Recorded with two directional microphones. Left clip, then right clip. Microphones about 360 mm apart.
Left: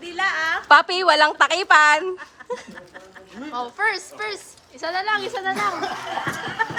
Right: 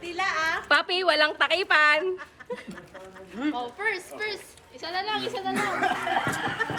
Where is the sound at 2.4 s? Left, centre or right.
Left.